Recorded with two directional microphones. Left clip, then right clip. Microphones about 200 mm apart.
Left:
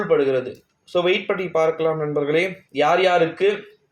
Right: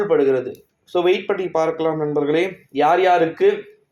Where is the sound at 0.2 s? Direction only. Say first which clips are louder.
Right 2 dB; 25° right (ahead or behind).